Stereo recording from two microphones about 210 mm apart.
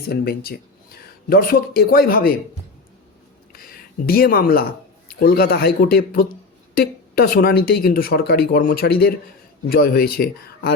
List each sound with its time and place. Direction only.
0.1 s speech: 45° left (ahead or behind)
3.5 s a sound: 45° left (ahead or behind)
5.0 s speech: 45° left (ahead or behind)